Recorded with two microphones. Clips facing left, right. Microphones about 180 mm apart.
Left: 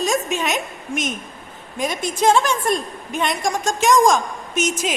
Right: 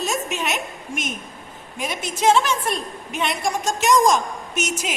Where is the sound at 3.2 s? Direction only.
45° left (ahead or behind).